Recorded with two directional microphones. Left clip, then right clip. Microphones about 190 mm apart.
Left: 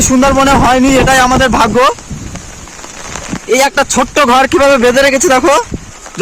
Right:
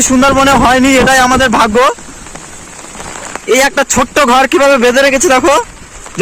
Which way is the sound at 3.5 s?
5° right (ahead or behind).